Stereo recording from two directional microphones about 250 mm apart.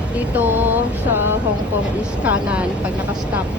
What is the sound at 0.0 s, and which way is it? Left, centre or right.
Music, centre.